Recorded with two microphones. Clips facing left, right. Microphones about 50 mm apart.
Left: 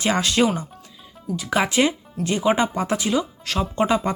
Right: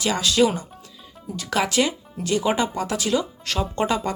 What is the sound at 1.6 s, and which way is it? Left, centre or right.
Speech, left.